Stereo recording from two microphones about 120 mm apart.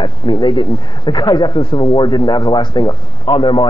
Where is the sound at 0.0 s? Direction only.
40° left (ahead or behind).